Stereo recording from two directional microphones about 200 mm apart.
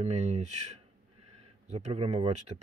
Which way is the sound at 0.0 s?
35° right (ahead or behind).